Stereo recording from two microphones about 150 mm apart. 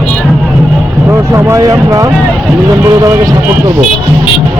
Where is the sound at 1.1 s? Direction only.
15° right (ahead or behind).